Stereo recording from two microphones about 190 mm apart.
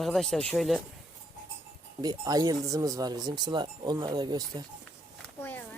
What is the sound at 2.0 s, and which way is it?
Speech, 20° right (ahead or behind).